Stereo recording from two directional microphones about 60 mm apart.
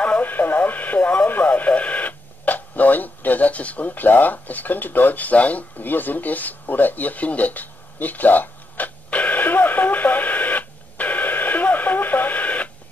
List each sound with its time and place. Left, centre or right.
0.0 s radio: left